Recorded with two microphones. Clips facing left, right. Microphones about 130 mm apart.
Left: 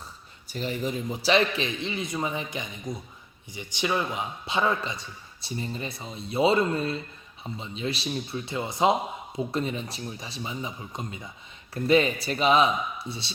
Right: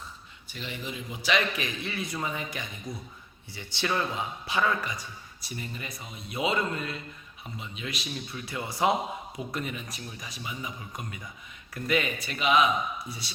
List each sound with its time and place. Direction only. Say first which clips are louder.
0.5 s a man's voice: left 8 dB; 40° left (ahead or behind)